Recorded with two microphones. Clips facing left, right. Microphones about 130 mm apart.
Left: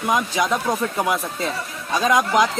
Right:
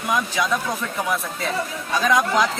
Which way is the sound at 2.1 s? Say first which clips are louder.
Left 2 dB; 20° left (ahead or behind).